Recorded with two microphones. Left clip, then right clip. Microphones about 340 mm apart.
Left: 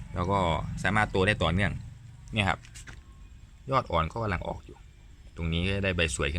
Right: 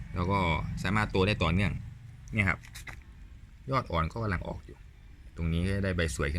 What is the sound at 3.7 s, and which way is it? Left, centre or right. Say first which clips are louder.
A man's voice: left 4 dB; centre.